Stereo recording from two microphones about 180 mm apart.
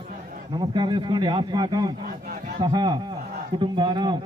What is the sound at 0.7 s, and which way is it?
A man's voice, 25° right (ahead or behind).